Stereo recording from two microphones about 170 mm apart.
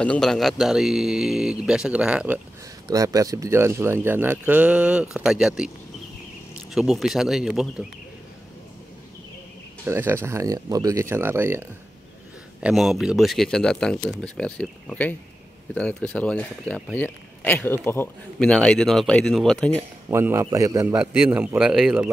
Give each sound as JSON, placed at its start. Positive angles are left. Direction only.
{"t": 0.0, "sound": "a man's voice", "side_deg": 5}
{"t": 2.9, "sound": "speech", "side_deg": -20}
{"t": 6.7, "sound": "a man's voice", "side_deg": 0}
{"t": 9.8, "sound": "speech", "side_deg": -15}
{"t": 12.5, "sound": "a man's voice", "side_deg": -5}
{"t": 20.1, "sound": "a man's voice", "side_deg": -15}
{"t": 21.0, "sound": "speech", "side_deg": -5}